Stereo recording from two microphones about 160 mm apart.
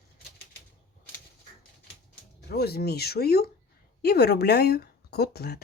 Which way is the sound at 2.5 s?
85° left.